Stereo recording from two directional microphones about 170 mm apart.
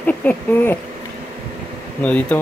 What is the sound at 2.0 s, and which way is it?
Speech, 10° left (ahead or behind).